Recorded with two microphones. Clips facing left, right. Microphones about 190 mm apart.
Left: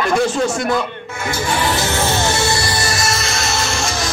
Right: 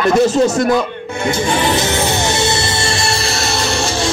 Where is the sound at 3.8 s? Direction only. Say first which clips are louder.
Right 4 dB; 30° right (ahead or behind).